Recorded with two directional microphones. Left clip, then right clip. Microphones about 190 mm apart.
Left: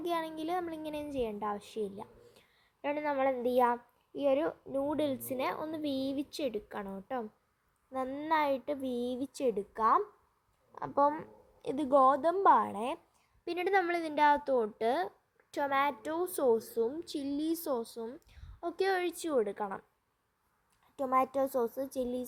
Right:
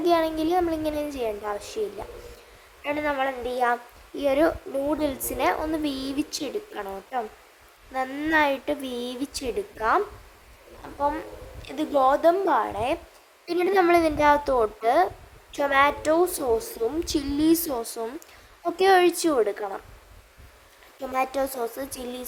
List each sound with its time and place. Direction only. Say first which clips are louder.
0.0 s a woman's voice: right 13 dB; 15° left (ahead or behind)
2.8 s a woman's voice: right 7 dB; 10° left (ahead or behind)
3.2 s a woman's voice: right 2 dB; 20° left (ahead or behind)
4.3 s a woman's voice: right 9 dB; 10° left (ahead or behind)
10.8 s a woman's voice: right 2 dB; 30° left (ahead or behind); by 19.8 s 10° left (ahead or behind)
21.1 s a woman's voice: right 4 dB; 15° left (ahead or behind)